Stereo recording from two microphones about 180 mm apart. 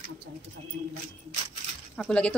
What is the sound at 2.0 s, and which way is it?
Speech, 5° left (ahead or behind).